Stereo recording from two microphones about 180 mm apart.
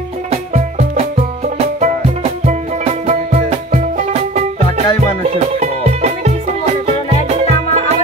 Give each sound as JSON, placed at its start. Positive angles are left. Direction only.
{"t": 0.3, "sound": "music", "side_deg": -35}